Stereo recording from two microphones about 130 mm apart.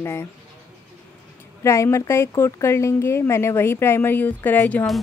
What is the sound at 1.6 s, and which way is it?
A woman's voice, 20° left (ahead or behind).